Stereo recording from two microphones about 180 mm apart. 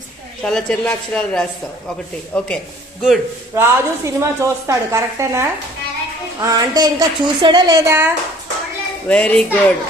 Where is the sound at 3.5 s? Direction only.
15° right (ahead or behind).